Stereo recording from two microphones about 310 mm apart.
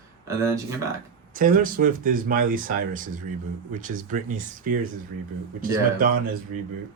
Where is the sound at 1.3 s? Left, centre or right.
Right.